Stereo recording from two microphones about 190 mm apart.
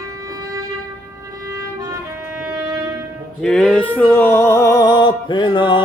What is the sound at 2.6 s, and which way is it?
Brass instrument, 15° right (ahead or behind).